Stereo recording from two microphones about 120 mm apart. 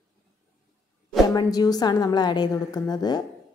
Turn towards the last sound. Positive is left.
turn(degrees=35)  # may be behind; listen again after turning